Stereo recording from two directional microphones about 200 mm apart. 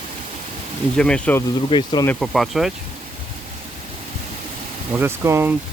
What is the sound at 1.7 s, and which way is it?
Speech, 25° left (ahead or behind).